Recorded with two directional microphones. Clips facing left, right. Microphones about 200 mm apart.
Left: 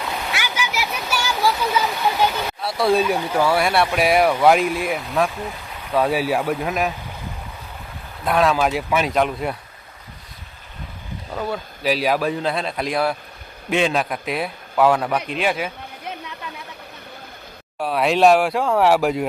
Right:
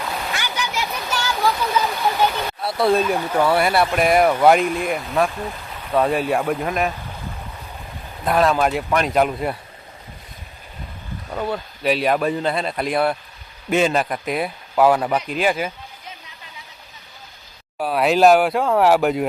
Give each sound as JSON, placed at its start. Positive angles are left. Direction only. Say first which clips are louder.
{"t": 0.3, "sound": "waterfall", "louder": "left 1 dB", "side_deg": 10}
{"t": 2.6, "sound": "speech", "louder": "even", "side_deg": 0}
{"t": 8.2, "sound": "speech", "louder": "right 1 dB", "side_deg": 0}
{"t": 11.3, "sound": "speech", "louder": "right 1 dB", "side_deg": 0}
{"t": 16.0, "sound": "chatter", "louder": "left 9 dB", "side_deg": 60}
{"t": 17.7, "sound": "speech", "louder": "right 1 dB", "side_deg": 0}